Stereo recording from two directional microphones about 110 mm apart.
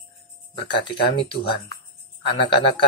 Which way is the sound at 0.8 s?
45° left (ahead or behind).